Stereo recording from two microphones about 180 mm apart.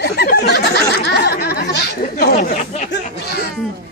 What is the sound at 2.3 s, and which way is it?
Speech, 40° left (ahead or behind).